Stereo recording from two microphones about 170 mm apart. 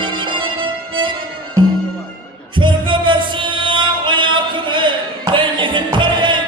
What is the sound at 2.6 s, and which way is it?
Music, 30° right (ahead or behind).